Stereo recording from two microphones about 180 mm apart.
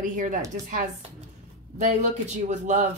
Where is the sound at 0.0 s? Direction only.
45° right (ahead or behind).